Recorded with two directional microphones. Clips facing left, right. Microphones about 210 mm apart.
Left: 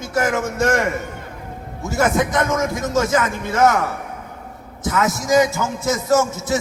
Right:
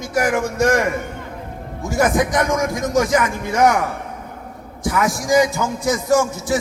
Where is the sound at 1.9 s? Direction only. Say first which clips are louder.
Right 1 dB; 15° right (ahead or behind).